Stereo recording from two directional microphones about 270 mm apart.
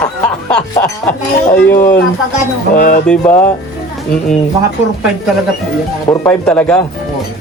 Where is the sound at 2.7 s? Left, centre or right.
Left.